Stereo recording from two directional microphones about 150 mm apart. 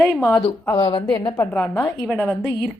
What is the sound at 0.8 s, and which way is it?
Speech, 35° left (ahead or behind).